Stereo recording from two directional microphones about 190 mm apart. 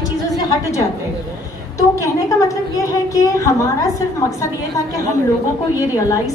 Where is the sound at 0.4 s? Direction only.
15° left (ahead or behind).